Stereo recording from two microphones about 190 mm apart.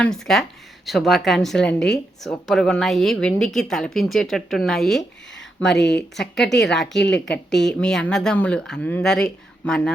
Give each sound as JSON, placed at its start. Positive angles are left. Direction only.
{"t": 0.0, "sound": "a woman's voice", "side_deg": 0}
{"t": 5.6, "sound": "speech", "side_deg": 65}
{"t": 7.7, "sound": "a woman's voice", "side_deg": 5}